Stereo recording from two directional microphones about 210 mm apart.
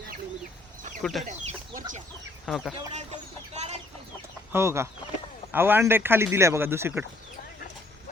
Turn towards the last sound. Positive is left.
turn(degrees=-10)  # may be behind; listen again after turning